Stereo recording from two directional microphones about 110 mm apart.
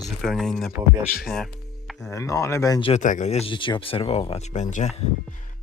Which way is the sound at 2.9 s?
90° left.